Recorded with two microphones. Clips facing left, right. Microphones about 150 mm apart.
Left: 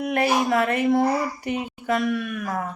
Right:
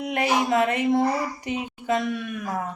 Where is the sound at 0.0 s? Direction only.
20° right (ahead or behind).